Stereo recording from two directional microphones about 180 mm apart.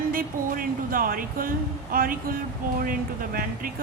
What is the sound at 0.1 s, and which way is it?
A woman's voice, 50° right (ahead or behind).